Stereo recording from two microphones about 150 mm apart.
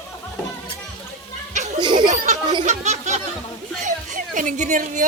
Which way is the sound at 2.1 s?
55° right (ahead or behind).